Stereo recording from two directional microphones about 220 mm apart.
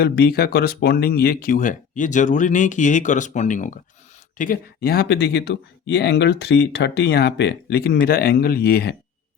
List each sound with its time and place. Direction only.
0.0 s speech: 45° left (ahead or behind)